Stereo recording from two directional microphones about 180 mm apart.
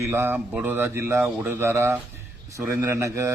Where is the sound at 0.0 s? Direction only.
15° right (ahead or behind).